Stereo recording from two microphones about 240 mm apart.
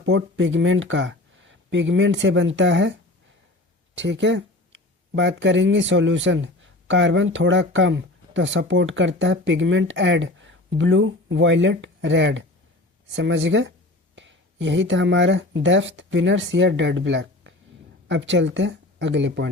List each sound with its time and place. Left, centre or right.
0.0 s speech: right
3.9 s speech: right